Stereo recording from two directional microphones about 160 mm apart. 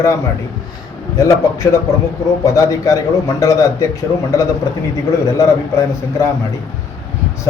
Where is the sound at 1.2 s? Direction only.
20° left (ahead or behind).